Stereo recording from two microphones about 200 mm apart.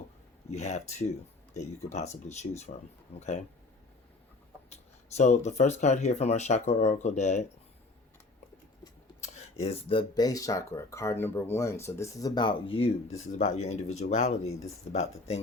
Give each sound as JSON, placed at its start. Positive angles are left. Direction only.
{"t": 0.5, "sound": "speech", "side_deg": 35}
{"t": 4.7, "sound": "speech", "side_deg": 35}
{"t": 9.2, "sound": "speech", "side_deg": 30}